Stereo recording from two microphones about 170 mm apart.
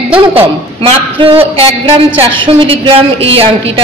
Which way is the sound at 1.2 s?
35° right (ahead or behind).